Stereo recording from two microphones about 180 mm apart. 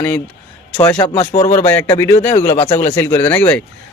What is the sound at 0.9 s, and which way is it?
Speech, 30° left (ahead or behind).